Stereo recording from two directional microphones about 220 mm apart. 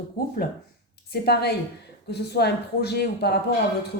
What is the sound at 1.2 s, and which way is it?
Speech, 45° left (ahead or behind).